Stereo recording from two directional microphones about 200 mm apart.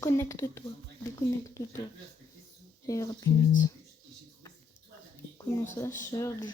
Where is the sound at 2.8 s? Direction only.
15° left (ahead or behind).